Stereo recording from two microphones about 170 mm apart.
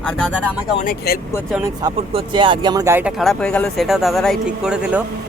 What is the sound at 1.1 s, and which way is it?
Speech, 65° left (ahead or behind).